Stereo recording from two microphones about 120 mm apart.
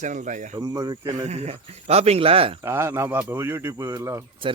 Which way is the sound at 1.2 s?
65° right (ahead or behind).